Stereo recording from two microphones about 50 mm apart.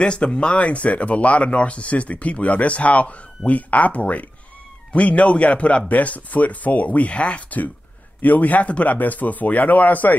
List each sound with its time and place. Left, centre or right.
0.0 s speech: centre; by 10.1 s left